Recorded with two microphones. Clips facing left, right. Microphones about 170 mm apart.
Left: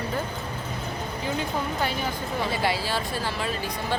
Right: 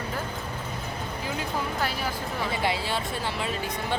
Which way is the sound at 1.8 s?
5° right (ahead or behind).